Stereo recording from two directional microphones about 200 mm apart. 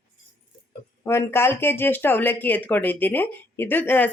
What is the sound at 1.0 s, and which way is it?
Speech, 10° left (ahead or behind).